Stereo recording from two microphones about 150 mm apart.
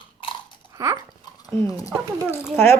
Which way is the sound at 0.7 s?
20° right (ahead or behind).